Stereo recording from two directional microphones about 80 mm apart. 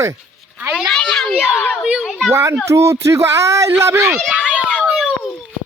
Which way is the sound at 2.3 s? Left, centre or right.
Right.